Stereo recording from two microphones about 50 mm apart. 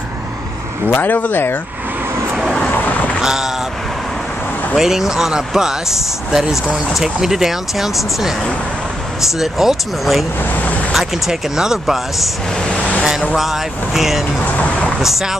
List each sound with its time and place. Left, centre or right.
0.8 s speech: left
2.8 s a sound: left
3.2 s boat: centre
4.7 s speech: centre
9.4 s speech: centre
12.6 s vehicle: centre
13.4 s speech: centre
14.4 s vehicle: left
15.0 s speech: centre